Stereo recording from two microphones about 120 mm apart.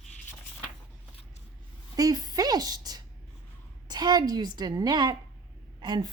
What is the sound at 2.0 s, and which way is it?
A woman's voice, 35° right (ahead or behind).